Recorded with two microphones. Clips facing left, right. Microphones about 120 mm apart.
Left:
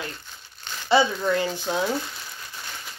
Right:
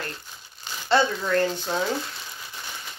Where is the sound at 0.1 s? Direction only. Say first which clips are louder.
Right 1 dB; 5° right (ahead or behind).